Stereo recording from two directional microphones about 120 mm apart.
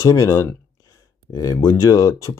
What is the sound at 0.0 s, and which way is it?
Speech, 25° left (ahead or behind).